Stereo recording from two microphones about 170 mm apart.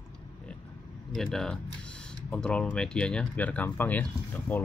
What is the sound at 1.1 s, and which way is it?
Speech, 5° left (ahead or behind).